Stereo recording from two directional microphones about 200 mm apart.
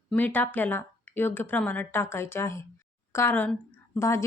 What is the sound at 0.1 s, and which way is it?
A woman's voice, 10° left (ahead or behind).